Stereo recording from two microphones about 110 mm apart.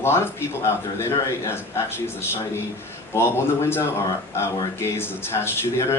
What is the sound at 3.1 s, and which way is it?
Speech, 25° left (ahead or behind).